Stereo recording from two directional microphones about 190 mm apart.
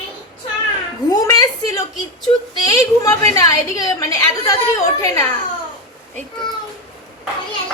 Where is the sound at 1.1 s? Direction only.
20° left (ahead or behind).